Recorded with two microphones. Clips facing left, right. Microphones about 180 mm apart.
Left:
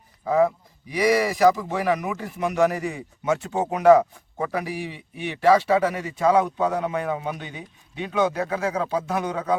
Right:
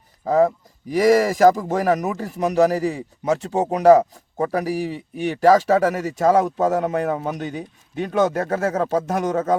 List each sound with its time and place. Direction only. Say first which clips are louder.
0.3 s speech: right 3 dB; 40° right (ahead or behind)